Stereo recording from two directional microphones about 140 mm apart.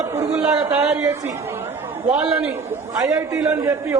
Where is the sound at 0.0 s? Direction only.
25° right (ahead or behind).